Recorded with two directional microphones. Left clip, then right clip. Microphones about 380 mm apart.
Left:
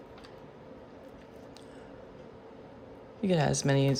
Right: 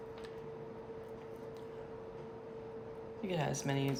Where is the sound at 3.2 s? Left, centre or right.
Centre.